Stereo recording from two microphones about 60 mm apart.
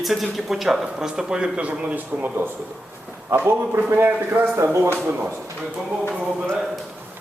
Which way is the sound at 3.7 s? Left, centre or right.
Right.